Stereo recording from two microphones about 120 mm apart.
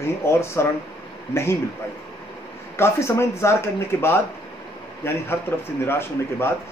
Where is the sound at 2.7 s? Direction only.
20° left (ahead or behind).